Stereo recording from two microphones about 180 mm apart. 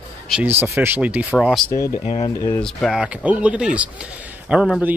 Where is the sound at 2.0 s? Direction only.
35° left (ahead or behind).